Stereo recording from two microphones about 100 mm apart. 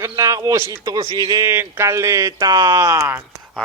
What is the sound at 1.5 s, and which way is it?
Speech, 25° right (ahead or behind).